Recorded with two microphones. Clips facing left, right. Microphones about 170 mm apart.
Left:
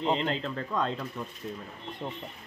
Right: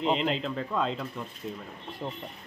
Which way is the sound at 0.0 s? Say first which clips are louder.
Right 1 dB; 5° right (ahead or behind).